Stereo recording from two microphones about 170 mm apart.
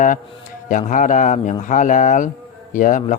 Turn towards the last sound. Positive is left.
turn(degrees=50)  # may be behind; listen again after turning